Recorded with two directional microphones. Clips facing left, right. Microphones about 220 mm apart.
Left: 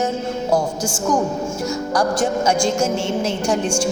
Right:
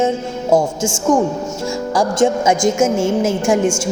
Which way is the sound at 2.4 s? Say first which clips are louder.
Right 4 dB; 20° right (ahead or behind).